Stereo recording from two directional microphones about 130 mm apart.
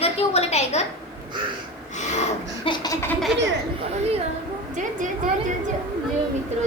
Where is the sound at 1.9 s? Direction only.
65° left (ahead or behind).